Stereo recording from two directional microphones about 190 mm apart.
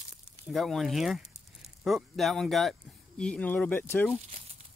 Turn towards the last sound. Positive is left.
turn(degrees=10)  # may be behind; listen again after turning